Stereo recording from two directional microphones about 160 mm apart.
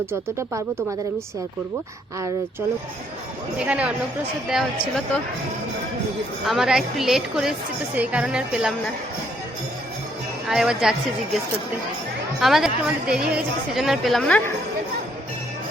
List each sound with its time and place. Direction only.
0.0 s speech: 15° right (ahead or behind)
2.1 s speech: 20° right (ahead or behind)
3.6 s speech: 5° right (ahead or behind)
6.4 s speech: centre (ahead or behind)
10.5 s speech: 5° right (ahead or behind)
12.4 s speech: centre (ahead or behind)